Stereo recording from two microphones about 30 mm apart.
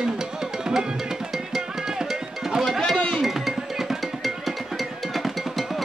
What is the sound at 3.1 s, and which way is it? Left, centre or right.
Music, centre.